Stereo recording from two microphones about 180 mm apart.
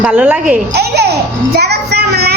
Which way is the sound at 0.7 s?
65° right (ahead or behind).